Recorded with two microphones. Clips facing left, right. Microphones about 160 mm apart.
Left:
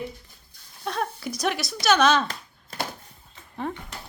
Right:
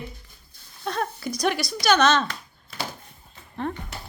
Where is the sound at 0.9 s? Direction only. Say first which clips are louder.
Right 1 dB; centre (ahead or behind).